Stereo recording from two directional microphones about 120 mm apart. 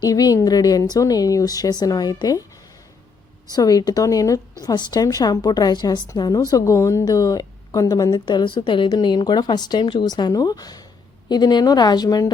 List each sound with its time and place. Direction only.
0.0 s a woman's voice: 30° left (ahead or behind)
3.5 s a woman's voice: 35° left (ahead or behind)